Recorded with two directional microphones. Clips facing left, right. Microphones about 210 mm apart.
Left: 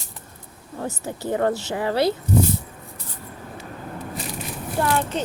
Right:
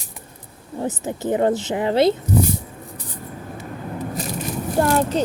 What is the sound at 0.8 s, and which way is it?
Speech, 20° right (ahead or behind).